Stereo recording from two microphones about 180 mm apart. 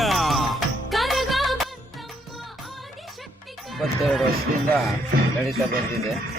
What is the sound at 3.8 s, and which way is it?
Speech, centre (ahead or behind).